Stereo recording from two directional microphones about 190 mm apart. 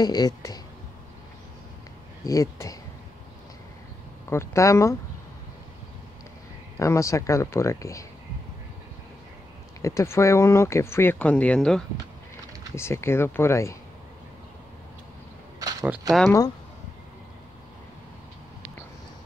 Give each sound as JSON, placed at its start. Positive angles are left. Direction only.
{"t": 0.0, "sound": "speech", "side_deg": 20}
{"t": 2.2, "sound": "speech", "side_deg": 15}
{"t": 4.3, "sound": "speech", "side_deg": 15}
{"t": 6.8, "sound": "speech", "side_deg": 15}
{"t": 9.8, "sound": "speech", "side_deg": 15}
{"t": 16.3, "sound": "speech", "side_deg": 15}